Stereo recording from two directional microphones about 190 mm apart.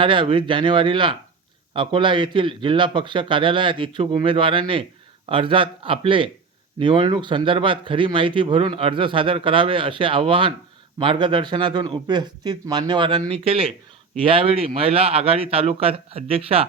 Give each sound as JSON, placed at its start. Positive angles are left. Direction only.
{"t": 0.0, "sound": "speech", "side_deg": -25}